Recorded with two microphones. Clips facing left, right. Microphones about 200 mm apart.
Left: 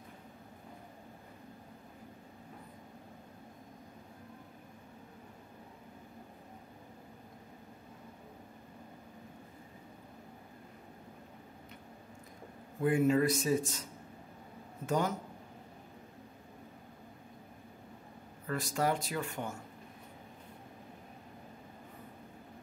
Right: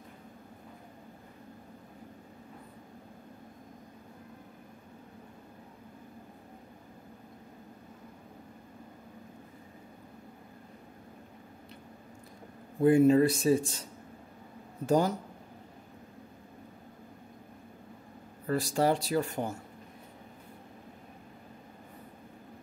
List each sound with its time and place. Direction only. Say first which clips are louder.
12.8 s speech: right 6 dB; 30° right (ahead or behind)
14.9 s speech: right 6 dB; 35° right (ahead or behind)
18.5 s speech: right 5 dB; 30° right (ahead or behind)